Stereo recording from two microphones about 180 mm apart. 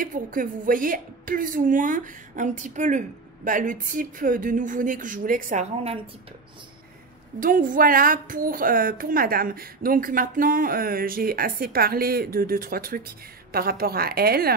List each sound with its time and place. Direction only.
0.0 s a woman's voice: 50° right (ahead or behind)
7.3 s a woman's voice: 50° right (ahead or behind)